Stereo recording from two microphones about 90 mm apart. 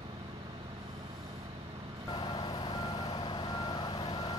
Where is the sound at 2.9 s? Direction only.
75° left (ahead or behind); by 4.4 s 55° left (ahead or behind).